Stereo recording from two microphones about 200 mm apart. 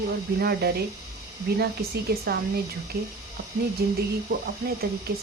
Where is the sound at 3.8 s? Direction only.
50° right (ahead or behind).